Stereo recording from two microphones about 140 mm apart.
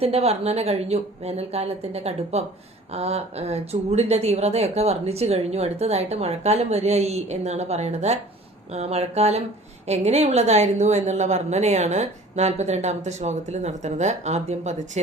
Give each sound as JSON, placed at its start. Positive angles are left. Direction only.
{"t": 0.0, "sound": "speech", "side_deg": -45}